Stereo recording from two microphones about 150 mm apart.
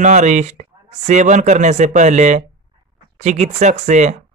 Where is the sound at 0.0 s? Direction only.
50° right (ahead or behind).